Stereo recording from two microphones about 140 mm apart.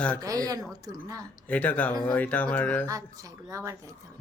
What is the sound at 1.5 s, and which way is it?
Speech, 10° left (ahead or behind).